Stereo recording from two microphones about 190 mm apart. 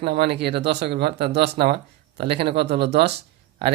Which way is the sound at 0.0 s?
60° right (ahead or behind).